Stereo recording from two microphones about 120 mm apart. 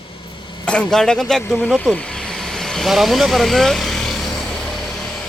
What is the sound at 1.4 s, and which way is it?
Speech, 15° left (ahead or behind).